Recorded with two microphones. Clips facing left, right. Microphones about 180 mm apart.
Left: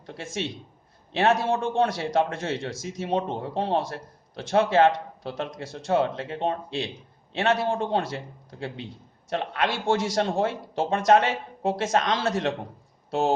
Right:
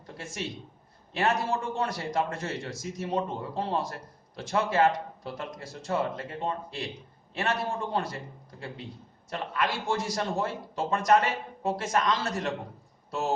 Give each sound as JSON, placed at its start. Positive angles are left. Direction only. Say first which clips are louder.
{"t": 0.1, "sound": "a man's voice", "louder": "left 5 dB", "side_deg": 85}
{"t": 9.9, "sound": "a man's voice", "louder": "left 5 dB", "side_deg": 85}
{"t": 13.1, "sound": "speech", "louder": "left 6 dB", "side_deg": 70}